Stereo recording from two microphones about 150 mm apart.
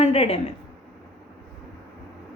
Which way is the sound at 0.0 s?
45° left (ahead or behind).